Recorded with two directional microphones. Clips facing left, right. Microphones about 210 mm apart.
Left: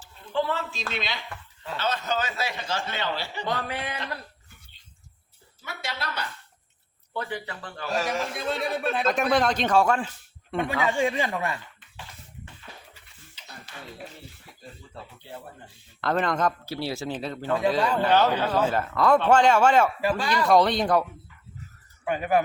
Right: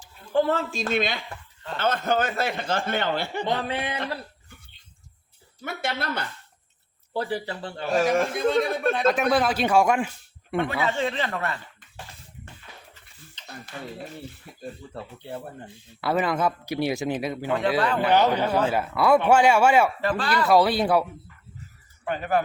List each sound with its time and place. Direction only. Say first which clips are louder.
0.3 s a man's voice: right 5 dB; 45° right (ahead or behind)
3.4 s speech: right 1 dB; 25° right (ahead or behind)
5.6 s a man's voice: right 6 dB; 55° right (ahead or behind)
7.1 s speech: right 5 dB; 35° right (ahead or behind)
8.1 s a man's voice: right 7 dB; 55° right (ahead or behind)
8.4 s speech: right 5 dB; 5° left (ahead or behind); by 10.1 s 15° right (ahead or behind)
10.6 s speech: left 1 dB; 15° left (ahead or behind)
13.4 s a sound: right 4 dB; 10° left (ahead or behind)
16.0 s a man's voice: right 1 dB; 5° right (ahead or behind)
20.0 s speech: even; 10° left (ahead or behind)
20.3 s speech: right 1 dB; 5° right (ahead or behind)
22.0 s speech: left 1 dB; 10° left (ahead or behind)